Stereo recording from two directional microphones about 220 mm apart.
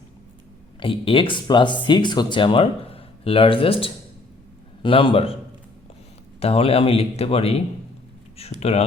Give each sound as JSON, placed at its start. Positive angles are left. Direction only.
{"t": 0.8, "sound": "speech", "side_deg": 25}
{"t": 6.4, "sound": "speech", "side_deg": 25}